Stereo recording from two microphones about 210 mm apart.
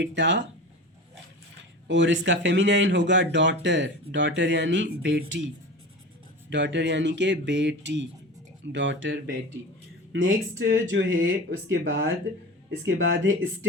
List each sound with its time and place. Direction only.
0.0 s speech: 60° right (ahead or behind)
1.9 s speech: 60° right (ahead or behind)
6.5 s speech: 60° right (ahead or behind)
10.2 s speech: 40° right (ahead or behind)
10.8 s speech: 65° right (ahead or behind)